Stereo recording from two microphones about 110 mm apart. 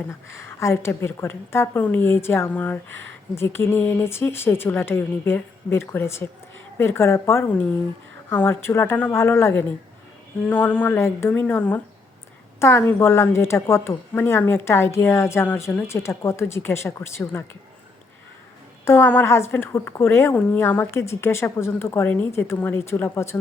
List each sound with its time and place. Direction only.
0.3 s a woman's voice: 25° left (ahead or behind)
18.9 s a woman's voice: 20° left (ahead or behind)